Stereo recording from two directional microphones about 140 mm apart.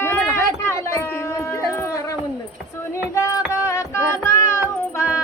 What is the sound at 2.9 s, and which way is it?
Music, 20° left (ahead or behind).